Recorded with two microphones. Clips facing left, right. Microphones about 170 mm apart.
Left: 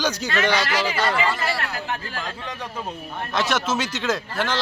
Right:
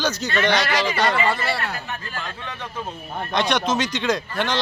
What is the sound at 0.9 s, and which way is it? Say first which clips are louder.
Speech: right 2 dB; 65° right (ahead or behind).